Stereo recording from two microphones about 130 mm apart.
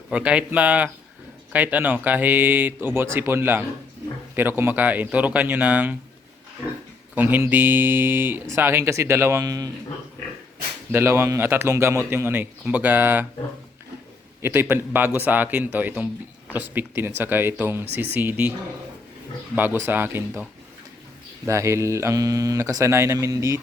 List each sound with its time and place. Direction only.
0.1 s a man's voice: 10° right (ahead or behind)
7.2 s speech: 15° right (ahead or behind)
10.9 s a man's voice: 20° right (ahead or behind)
14.4 s a man's voice: 15° right (ahead or behind)
19.5 s a man's voice: 15° right (ahead or behind)
21.4 s speech: 20° right (ahead or behind)